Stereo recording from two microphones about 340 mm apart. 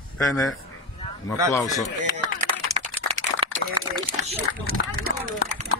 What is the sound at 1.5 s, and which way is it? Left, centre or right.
Speech, centre.